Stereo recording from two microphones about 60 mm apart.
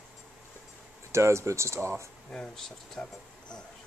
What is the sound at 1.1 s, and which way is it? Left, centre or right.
Speech, right.